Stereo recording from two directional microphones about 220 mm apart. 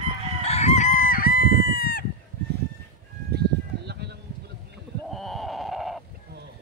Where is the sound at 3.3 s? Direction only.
50° right (ahead or behind).